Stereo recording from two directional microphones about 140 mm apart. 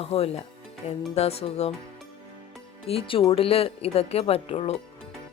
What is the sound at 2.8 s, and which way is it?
Speech, 40° left (ahead or behind).